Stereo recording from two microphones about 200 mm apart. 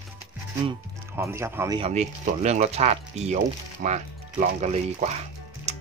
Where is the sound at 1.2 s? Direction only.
15° right (ahead or behind).